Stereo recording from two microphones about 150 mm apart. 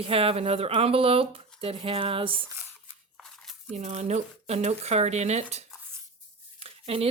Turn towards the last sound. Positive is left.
turn(degrees=-40)  # may be behind; listen again after turning